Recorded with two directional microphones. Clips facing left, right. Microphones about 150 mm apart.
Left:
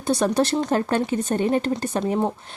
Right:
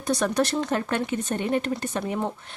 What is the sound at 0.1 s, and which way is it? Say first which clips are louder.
Speech: left 3 dB; 30° left (ahead or behind).